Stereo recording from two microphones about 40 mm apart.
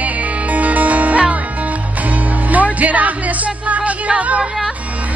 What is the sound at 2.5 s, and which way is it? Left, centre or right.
Music, right.